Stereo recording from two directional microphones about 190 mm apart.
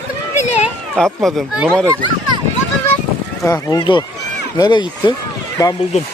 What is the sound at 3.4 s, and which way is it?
Speech, 20° left (ahead or behind).